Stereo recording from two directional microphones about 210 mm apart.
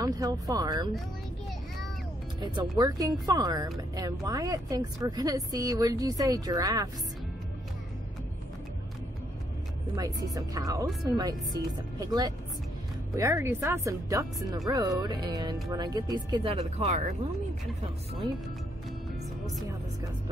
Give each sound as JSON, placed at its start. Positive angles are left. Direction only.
{"t": 0.0, "sound": "speech", "side_deg": -15}
{"t": 2.8, "sound": "speech", "side_deg": -15}
{"t": 9.9, "sound": "speech", "side_deg": -15}